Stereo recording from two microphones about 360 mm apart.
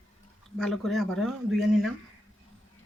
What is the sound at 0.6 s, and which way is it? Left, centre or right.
Speech, centre.